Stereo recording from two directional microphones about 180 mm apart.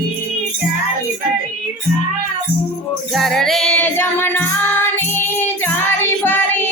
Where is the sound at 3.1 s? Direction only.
Centre (ahead or behind).